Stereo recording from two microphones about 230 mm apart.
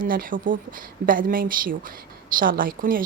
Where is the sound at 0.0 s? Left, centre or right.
Right.